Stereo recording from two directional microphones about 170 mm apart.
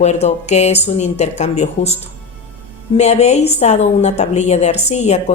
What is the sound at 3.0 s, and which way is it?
A woman's voice, 40° left (ahead or behind).